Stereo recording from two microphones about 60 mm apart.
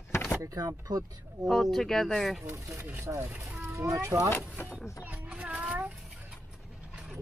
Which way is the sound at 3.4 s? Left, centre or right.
Right.